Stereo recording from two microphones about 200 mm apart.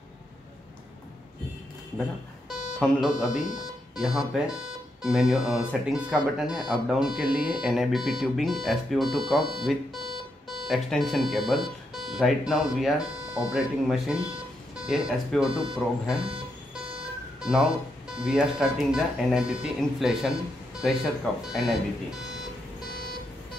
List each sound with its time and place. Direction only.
2.8 s speech: centre (ahead or behind)
17.4 s music: centre (ahead or behind)
18.1 s speech: 5° right (ahead or behind)